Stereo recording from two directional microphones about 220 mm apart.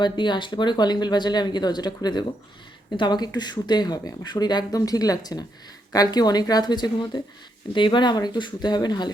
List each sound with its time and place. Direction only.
0.0 s speech: 20° left (ahead or behind)